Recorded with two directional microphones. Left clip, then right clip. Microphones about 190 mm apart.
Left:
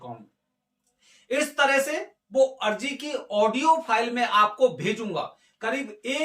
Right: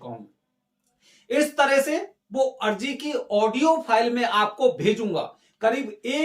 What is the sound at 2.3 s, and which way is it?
Speech, 15° right (ahead or behind).